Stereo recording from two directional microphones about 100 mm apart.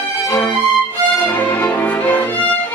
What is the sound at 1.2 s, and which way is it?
Music, 15° left (ahead or behind).